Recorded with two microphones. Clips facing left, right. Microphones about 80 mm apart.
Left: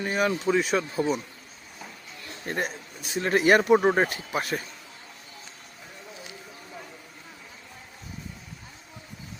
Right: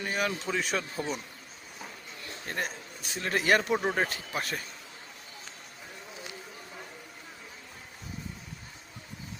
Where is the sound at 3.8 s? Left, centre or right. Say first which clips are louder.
Left 7 dB; left.